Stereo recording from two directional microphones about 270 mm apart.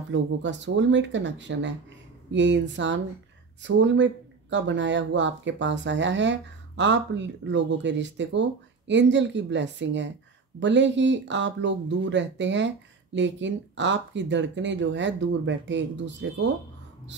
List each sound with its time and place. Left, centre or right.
0.1 s speech: right